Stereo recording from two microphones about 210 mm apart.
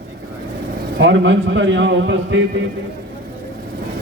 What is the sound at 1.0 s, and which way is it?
A man's voice, 60° right (ahead or behind).